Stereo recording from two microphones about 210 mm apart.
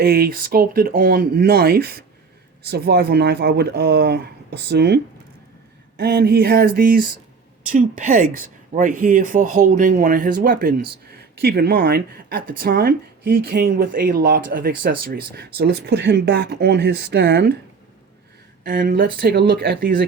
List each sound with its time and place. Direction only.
0.0 s speech: 45° right (ahead or behind)
6.0 s speech: 50° right (ahead or behind)
18.6 s speech: 40° right (ahead or behind)